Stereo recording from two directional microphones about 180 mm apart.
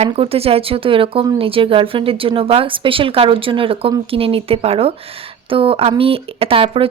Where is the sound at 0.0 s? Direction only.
35° right (ahead or behind).